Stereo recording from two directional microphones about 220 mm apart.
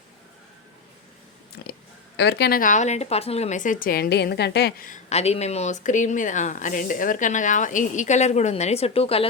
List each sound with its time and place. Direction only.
2.1 s speech: 50° left (ahead or behind); by 9.2 s 25° left (ahead or behind)